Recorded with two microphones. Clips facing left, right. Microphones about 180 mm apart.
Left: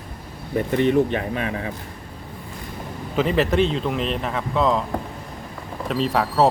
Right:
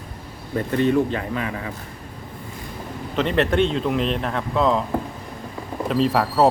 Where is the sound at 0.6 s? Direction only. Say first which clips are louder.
Left 1 dB; 20° left (ahead or behind).